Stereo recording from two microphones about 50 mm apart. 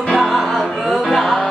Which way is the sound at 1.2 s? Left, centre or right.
Centre.